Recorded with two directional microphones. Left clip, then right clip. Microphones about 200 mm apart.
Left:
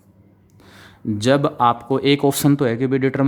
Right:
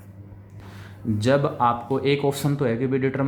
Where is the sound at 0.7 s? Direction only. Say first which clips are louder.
Left 3 dB; 45° left (ahead or behind).